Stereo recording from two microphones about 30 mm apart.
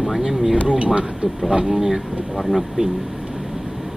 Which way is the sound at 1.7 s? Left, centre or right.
Centre.